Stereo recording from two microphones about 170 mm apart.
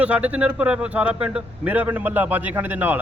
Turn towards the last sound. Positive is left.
turn(degrees=-10)  # may be behind; listen again after turning